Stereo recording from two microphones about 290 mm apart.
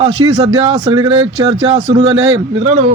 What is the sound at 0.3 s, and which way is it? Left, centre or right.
A man's voice, centre.